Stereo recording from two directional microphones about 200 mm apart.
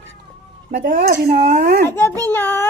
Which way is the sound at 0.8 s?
45° right (ahead or behind).